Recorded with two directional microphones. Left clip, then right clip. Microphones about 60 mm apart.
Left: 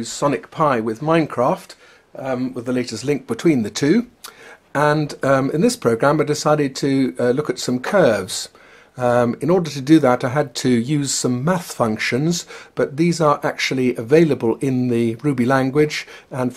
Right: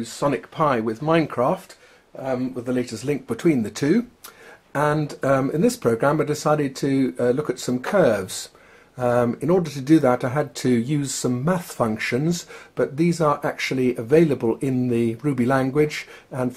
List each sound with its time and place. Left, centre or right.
0.0 s speech: centre
16.3 s beatboxing: centre